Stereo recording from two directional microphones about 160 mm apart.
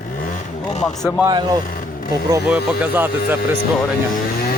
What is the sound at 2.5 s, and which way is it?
Speech, 10° right (ahead or behind).